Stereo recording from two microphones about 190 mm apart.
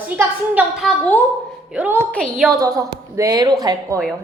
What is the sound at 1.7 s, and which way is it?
Speech, 5° right (ahead or behind).